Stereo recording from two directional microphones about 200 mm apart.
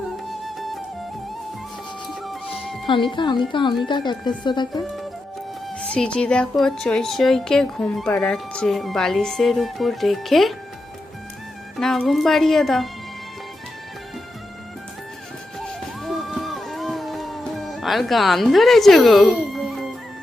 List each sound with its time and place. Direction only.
0.3 s music: centre (ahead or behind)
2.0 s music: centre (ahead or behind)
2.8 s speech: 25° left (ahead or behind)
5.8 s speech: 5° left (ahead or behind)
11.8 s speech: centre (ahead or behind)
15.6 s music: centre (ahead or behind)